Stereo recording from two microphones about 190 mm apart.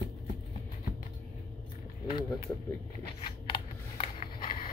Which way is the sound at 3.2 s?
25° left (ahead or behind).